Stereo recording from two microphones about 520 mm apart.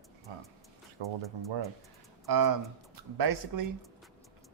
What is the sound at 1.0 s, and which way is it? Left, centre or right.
Speech, right.